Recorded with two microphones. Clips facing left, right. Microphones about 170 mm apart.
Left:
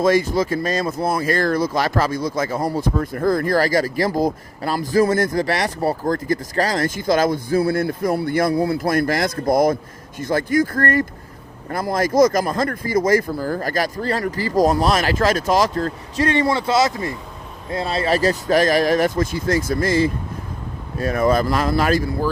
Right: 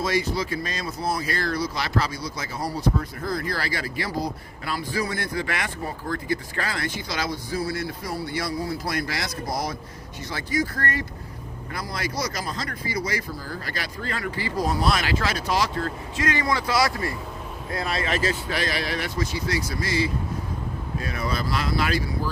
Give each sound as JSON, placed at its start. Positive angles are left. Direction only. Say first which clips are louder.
{"t": 0.0, "sound": "speech", "louder": "left 8 dB", "side_deg": 50}